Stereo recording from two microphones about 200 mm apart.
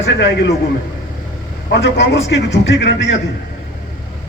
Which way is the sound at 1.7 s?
60° left (ahead or behind).